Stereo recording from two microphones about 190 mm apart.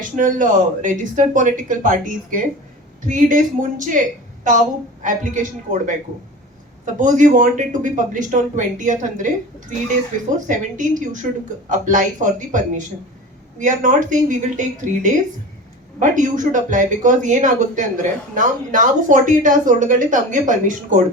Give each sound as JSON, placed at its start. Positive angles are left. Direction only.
{"t": 0.0, "sound": "speech", "side_deg": -45}
{"t": 5.0, "sound": "speech", "side_deg": -40}